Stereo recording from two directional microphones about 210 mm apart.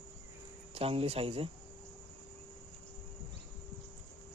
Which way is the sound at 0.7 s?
25° right (ahead or behind).